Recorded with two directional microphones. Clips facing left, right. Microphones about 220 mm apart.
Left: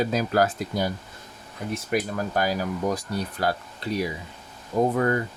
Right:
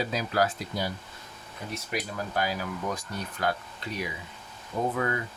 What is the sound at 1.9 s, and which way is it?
Speech, 45° left (ahead or behind).